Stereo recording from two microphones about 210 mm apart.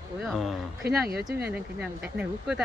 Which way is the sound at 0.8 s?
50° right (ahead or behind).